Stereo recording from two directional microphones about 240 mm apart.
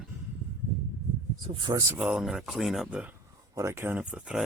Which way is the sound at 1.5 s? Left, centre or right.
Centre.